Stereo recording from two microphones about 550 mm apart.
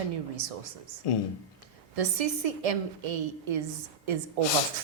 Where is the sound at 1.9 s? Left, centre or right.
Right.